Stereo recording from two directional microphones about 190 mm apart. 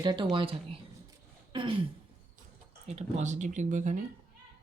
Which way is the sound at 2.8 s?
35° right (ahead or behind).